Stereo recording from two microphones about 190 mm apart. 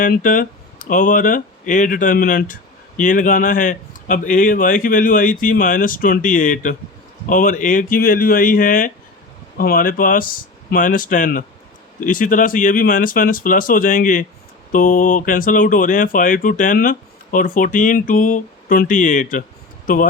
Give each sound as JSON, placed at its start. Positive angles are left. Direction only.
{"t": 0.0, "sound": "speech", "side_deg": 45}